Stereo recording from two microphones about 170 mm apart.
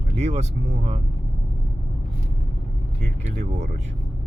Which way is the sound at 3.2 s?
40° right (ahead or behind).